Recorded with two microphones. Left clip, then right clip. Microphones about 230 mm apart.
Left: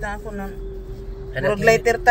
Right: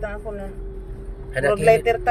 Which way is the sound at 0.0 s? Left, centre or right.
Left.